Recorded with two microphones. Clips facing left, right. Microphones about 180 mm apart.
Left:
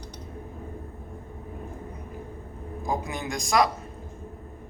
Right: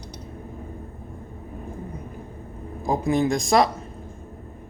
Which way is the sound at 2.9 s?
35° right (ahead or behind).